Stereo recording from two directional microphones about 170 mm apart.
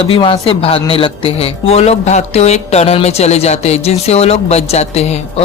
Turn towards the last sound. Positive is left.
turn(degrees=40)  # may be behind; listen again after turning